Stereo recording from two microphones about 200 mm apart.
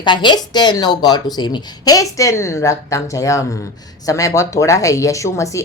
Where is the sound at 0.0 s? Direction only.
25° left (ahead or behind).